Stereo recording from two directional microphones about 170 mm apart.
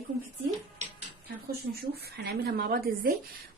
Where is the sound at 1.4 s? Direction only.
70° right (ahead or behind).